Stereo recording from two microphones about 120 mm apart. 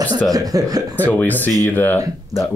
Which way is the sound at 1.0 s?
15° left (ahead or behind).